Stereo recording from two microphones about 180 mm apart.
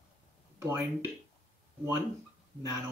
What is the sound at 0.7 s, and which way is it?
Speech, 15° right (ahead or behind).